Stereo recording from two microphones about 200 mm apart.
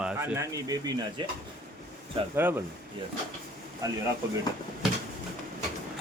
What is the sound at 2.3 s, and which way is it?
Speech, 10° right (ahead or behind).